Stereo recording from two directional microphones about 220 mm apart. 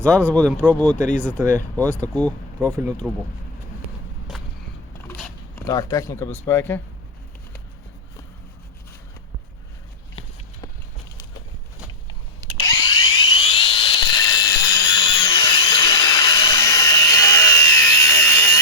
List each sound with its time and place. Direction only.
0.3 s speech: 5° left (ahead or behind)
1.3 s speech: 10° right (ahead or behind)
1.5 s speech: 5° left (ahead or behind)
2.2 s speech: 15° right (ahead or behind)
4.3 s a sound: centre (ahead or behind)
5.6 s speech: 15° left (ahead or behind)
12.6 s a sound: 20° left (ahead or behind)